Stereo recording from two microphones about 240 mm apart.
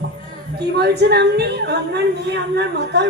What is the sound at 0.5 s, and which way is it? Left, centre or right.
A woman's voice, right.